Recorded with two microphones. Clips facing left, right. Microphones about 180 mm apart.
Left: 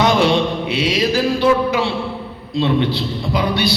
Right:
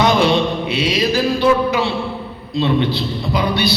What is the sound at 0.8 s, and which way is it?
A man's voice, 90° left.